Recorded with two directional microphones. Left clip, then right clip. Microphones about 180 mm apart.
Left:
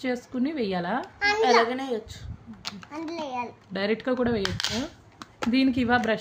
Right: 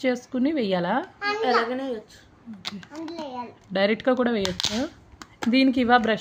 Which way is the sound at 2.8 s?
45° left (ahead or behind).